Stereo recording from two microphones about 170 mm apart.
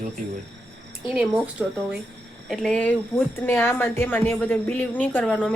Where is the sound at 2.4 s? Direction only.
5° left (ahead or behind).